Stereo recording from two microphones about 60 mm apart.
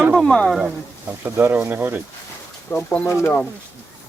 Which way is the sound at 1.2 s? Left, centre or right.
Right.